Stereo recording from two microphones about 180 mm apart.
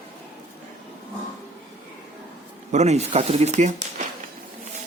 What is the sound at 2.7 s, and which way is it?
Speech, 40° right (ahead or behind).